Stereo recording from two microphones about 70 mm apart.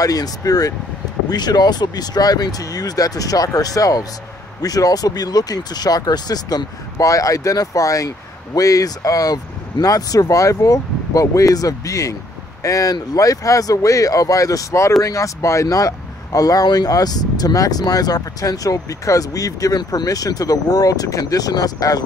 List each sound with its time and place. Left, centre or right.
0.0 s speech: left
1.3 s speech: left